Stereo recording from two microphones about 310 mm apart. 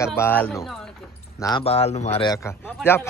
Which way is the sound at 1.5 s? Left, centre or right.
Centre.